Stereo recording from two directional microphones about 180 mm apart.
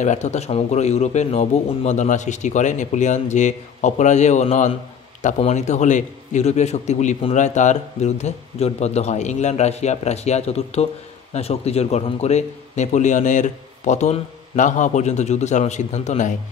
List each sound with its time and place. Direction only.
0.0 s a man's voice: 40° left (ahead or behind)